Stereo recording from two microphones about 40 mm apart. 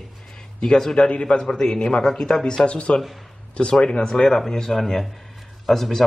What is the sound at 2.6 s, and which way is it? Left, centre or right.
Speech, left.